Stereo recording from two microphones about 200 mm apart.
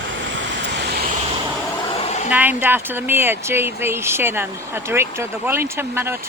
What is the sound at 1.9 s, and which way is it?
Hair dryer, 30° left (ahead or behind).